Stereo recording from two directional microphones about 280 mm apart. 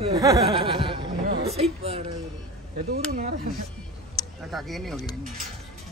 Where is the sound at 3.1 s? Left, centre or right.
Right.